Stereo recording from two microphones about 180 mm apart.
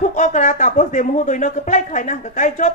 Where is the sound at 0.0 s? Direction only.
45° left (ahead or behind).